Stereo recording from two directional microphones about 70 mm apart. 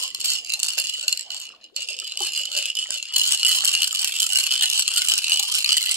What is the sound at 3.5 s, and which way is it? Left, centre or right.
Rattle, right.